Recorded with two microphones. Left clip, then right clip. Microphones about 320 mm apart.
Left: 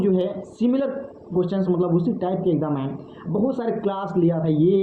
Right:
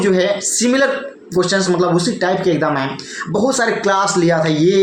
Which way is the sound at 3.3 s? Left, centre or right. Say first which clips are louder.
Right 7 dB; right.